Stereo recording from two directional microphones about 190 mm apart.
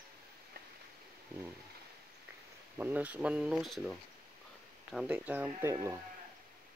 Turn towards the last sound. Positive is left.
turn(degrees=-15)  # may be behind; listen again after turning